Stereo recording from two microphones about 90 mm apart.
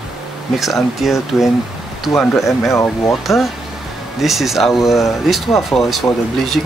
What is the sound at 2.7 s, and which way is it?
Speech, 35° left (ahead or behind).